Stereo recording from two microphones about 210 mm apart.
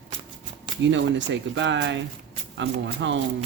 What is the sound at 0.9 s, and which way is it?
Speech, 60° right (ahead or behind).